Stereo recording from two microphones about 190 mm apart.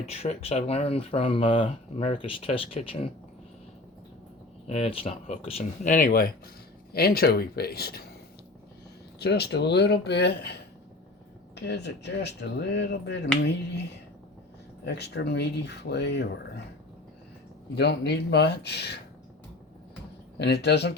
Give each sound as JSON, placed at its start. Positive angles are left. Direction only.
{"t": 0.1, "sound": "speech", "side_deg": 35}
{"t": 4.6, "sound": "speech", "side_deg": 35}
{"t": 9.1, "sound": "speech", "side_deg": 60}
{"t": 14.8, "sound": "speech", "side_deg": 60}
{"t": 17.7, "sound": "speech", "side_deg": 60}
{"t": 20.4, "sound": "speech", "side_deg": 60}